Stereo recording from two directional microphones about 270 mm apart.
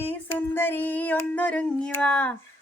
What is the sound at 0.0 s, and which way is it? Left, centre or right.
Female singing, centre.